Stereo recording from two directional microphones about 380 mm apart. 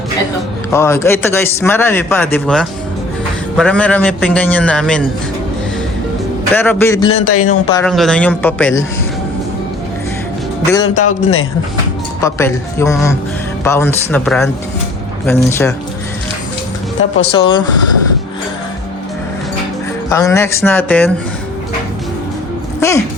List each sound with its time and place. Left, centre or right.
0.7 s a man's voice: centre
6.5 s a man's voice: centre
7.1 s a man's voice: left
7.7 s a man's voice: centre
10.8 s a man's voice: left
12.2 s a man's voice: centre
17.2 s speech: centre
20.1 s speech: centre